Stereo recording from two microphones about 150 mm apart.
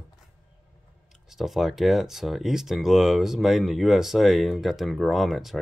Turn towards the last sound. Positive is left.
turn(degrees=0)  # may be behind; listen again after turning